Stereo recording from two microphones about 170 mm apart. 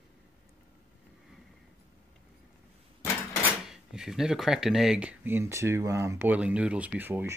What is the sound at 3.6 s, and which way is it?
Speech, 5° right (ahead or behind).